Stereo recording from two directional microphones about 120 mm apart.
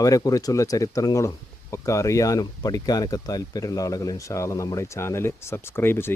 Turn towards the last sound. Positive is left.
turn(degrees=20)  # may be behind; listen again after turning